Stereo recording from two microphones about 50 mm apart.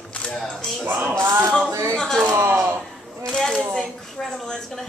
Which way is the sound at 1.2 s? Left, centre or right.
Right.